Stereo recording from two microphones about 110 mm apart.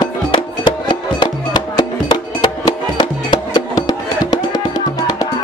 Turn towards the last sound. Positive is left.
turn(degrees=40)  # may be behind; listen again after turning